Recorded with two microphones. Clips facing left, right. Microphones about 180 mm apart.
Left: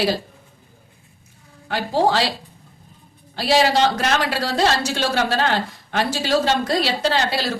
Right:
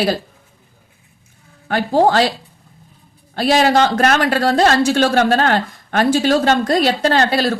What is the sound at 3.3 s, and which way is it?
Speech, 50° right (ahead or behind).